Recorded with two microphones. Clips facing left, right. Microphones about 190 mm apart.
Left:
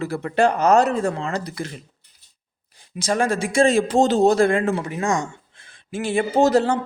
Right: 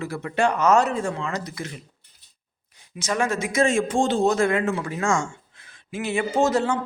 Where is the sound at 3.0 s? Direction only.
35° left (ahead or behind).